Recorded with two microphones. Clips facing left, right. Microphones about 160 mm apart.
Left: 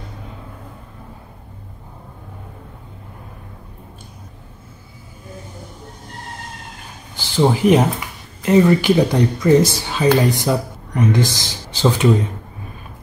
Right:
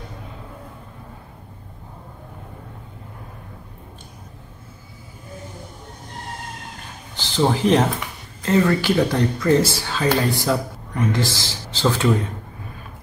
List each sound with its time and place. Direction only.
7.2 s speech: 10° left (ahead or behind)